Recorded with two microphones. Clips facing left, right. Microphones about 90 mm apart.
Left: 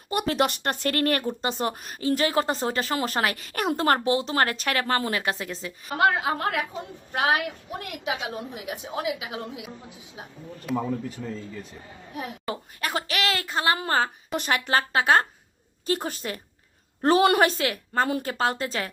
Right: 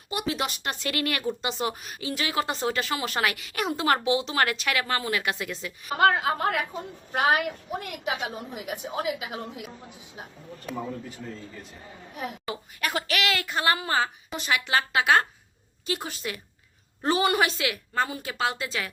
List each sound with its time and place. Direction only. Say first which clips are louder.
0.1 s a woman's voice: left 5 dB; 50° left (ahead or behind); by 5.9 s 35° left (ahead or behind)
5.9 s a woman's voice: right 1 dB; centre (ahead or behind)
12.5 s a woman's voice: left 2 dB; 30° left (ahead or behind)
13.7 s speech: left 2 dB; 40° left (ahead or behind)
17.0 s a woman's voice: left 4 dB; 55° left (ahead or behind)